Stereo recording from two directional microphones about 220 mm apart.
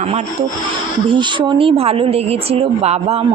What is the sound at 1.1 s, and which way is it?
Speech, 20° right (ahead or behind).